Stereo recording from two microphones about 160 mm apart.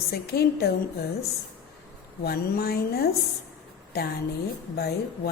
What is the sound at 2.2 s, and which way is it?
Speech, 80° left.